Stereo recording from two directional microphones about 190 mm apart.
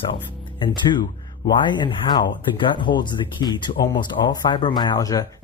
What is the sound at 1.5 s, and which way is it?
Speech, 25° left (ahead or behind).